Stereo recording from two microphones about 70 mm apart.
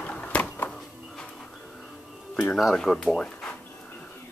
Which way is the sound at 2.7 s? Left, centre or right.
Centre.